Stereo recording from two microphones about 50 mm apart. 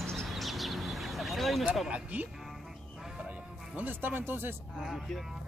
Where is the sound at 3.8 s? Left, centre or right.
Right.